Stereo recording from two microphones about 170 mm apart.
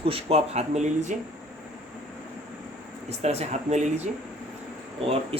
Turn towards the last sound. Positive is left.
turn(degrees=-35)  # may be behind; listen again after turning